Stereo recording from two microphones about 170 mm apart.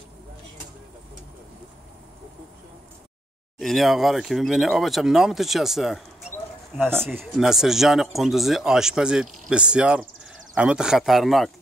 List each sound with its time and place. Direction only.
3.5 s speech: centre (ahead or behind)
7.3 s speech: centre (ahead or behind)